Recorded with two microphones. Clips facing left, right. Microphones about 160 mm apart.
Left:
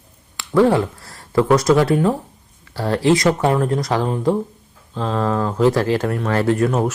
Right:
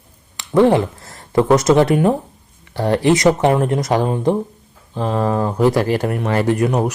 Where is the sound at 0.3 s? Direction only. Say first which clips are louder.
Right 2 dB; 20° right (ahead or behind).